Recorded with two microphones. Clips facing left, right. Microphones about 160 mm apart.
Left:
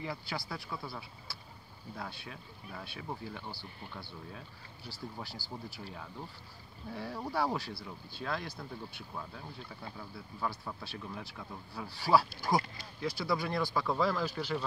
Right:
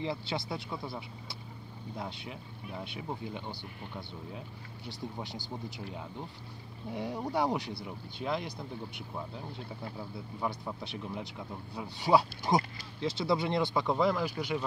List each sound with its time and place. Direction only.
0.0 s speech: 25° right (ahead or behind)
6.9 s speech: 20° right (ahead or behind)